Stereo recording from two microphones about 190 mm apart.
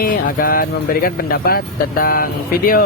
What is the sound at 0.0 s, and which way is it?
Speech, 50° left (ahead or behind).